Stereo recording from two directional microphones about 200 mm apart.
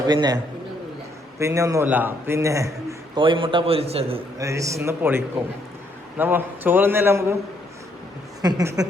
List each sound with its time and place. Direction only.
0.0 s a man's voice: 20° right (ahead or behind)
1.4 s a man's voice: 15° right (ahead or behind)
3.2 s a man's voice: 25° right (ahead or behind)
4.4 s a man's voice: 15° right (ahead or behind)
8.4 s a man's voice: 20° right (ahead or behind)